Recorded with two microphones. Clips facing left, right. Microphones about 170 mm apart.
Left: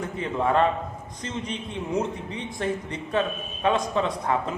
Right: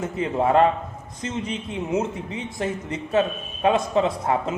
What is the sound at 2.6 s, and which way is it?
A man's voice, 25° right (ahead or behind).